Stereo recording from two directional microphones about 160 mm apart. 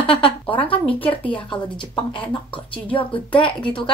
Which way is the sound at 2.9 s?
35° left (ahead or behind).